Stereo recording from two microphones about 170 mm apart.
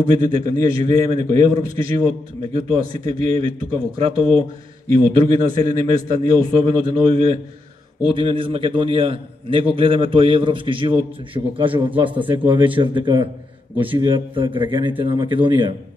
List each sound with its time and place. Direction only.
0.0 s a man's voice: 35° right (ahead or behind)
5.1 s a man's voice: 30° right (ahead or behind)